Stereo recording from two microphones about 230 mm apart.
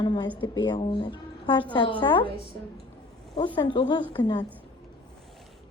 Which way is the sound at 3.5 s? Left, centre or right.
Centre.